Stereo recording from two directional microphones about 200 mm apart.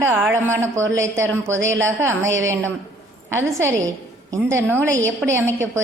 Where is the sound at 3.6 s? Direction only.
15° right (ahead or behind).